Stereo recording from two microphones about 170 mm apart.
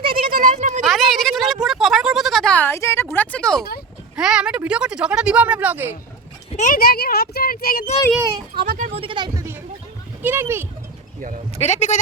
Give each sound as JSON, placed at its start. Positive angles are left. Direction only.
{"t": 0.2, "sound": "a sound", "side_deg": -55}
{"t": 0.9, "sound": "a sound", "side_deg": 0}
{"t": 3.2, "sound": "speech", "side_deg": 5}
{"t": 6.6, "sound": "speech", "side_deg": 55}
{"t": 8.5, "sound": "speech", "side_deg": -60}
{"t": 8.9, "sound": "speech", "side_deg": -30}
{"t": 11.2, "sound": "speech", "side_deg": -50}
{"t": 11.6, "sound": "speech", "side_deg": 45}